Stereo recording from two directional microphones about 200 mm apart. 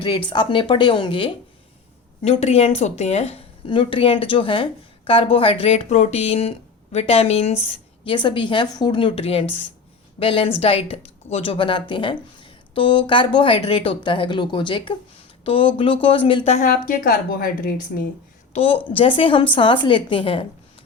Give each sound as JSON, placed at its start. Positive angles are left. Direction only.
{"t": 0.3, "sound": "a woman's voice", "side_deg": 25}
{"t": 18.5, "sound": "a woman's voice", "side_deg": 30}